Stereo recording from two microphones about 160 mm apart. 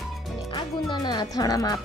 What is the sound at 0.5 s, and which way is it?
Music, 30° left (ahead or behind).